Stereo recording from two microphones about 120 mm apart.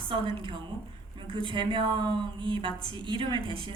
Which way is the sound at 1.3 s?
45° right (ahead or behind).